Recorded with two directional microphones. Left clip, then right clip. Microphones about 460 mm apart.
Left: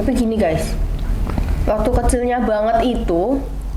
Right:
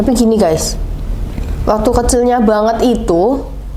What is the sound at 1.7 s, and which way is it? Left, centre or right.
A woman's voice, right.